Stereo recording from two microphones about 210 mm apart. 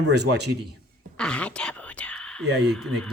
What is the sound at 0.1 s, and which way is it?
Speech, 55° right (ahead or behind).